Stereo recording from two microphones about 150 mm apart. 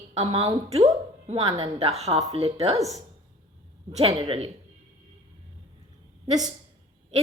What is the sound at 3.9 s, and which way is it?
Speech, 40° right (ahead or behind).